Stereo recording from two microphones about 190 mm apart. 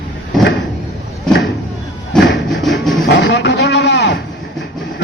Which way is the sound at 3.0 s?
70° left (ahead or behind).